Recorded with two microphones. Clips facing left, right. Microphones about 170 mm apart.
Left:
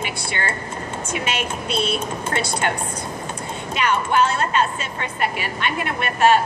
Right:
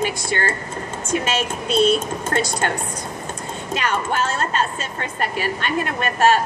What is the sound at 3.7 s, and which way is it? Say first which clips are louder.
A woman's voice: left 2 dB; 45° right (ahead or behind).